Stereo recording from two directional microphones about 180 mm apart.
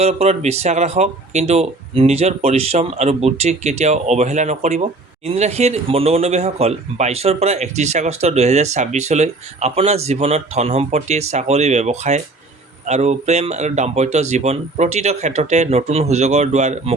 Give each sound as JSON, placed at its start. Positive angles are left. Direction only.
{"t": 0.0, "sound": "speech", "side_deg": -35}